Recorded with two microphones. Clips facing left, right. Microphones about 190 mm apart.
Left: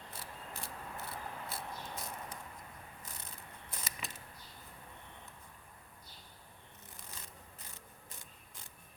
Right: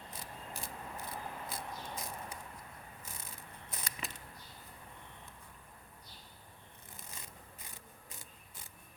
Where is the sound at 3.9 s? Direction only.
Centre (ahead or behind).